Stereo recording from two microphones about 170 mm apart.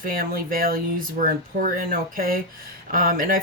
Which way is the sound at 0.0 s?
55° right (ahead or behind).